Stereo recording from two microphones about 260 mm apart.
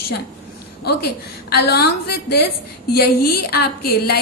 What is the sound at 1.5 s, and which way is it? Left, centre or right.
Speech, left.